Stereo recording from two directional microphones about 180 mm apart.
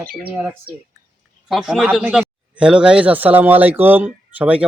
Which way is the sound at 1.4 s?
Centre (ahead or behind).